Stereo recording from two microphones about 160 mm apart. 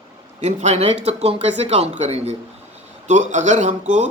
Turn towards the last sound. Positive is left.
turn(degrees=-50)  # may be behind; listen again after turning